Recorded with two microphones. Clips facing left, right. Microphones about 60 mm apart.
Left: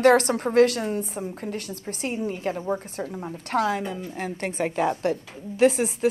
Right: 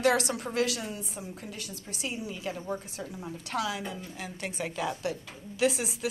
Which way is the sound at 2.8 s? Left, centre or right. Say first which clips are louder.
Left 7 dB; left.